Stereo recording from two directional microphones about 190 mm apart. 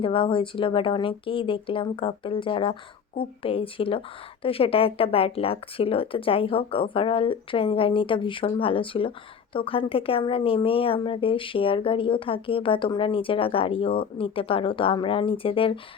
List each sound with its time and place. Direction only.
0.0 s speech: 25° left (ahead or behind)